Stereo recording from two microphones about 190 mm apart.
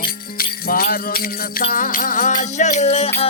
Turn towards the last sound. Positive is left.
turn(degrees=35)  # may be behind; listen again after turning